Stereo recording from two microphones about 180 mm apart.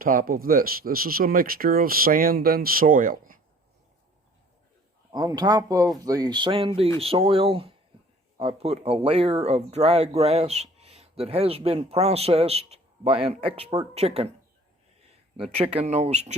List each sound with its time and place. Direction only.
0.0 s speech: 50° right (ahead or behind)
5.1 s speech: 20° right (ahead or behind)
15.5 s speech: 35° right (ahead or behind)